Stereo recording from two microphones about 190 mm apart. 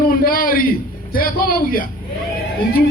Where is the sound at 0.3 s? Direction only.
50° left (ahead or behind).